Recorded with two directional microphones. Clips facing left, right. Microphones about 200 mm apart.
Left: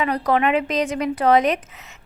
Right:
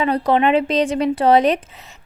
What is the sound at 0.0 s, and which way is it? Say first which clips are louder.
A woman's voice: right 3 dB; 25° right (ahead or behind).